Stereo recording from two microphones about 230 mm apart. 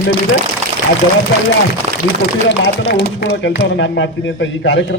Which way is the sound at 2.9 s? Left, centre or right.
Left.